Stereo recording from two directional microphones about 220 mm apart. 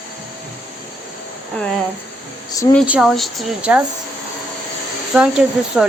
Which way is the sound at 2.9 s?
Centre (ahead or behind).